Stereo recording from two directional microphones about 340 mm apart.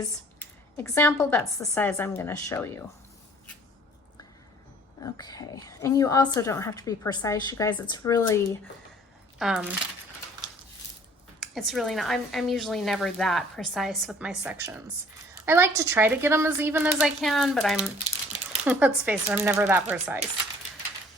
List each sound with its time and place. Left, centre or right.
0.0 s a woman's voice: centre
5.1 s a woman's voice: centre
9.4 s a woman's voice: centre
11.3 s a woman's voice: centre